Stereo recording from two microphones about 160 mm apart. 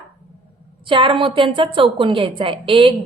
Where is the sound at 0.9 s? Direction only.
30° right (ahead or behind).